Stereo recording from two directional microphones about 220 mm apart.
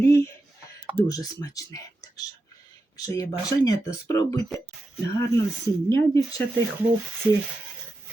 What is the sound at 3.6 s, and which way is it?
Speech, 15° left (ahead or behind).